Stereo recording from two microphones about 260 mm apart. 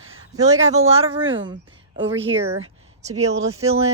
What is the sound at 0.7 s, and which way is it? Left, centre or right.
Speech, right.